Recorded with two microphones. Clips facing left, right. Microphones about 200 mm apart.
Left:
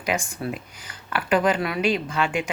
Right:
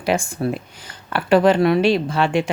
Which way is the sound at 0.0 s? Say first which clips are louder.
Right 6 dB; 30° right (ahead or behind).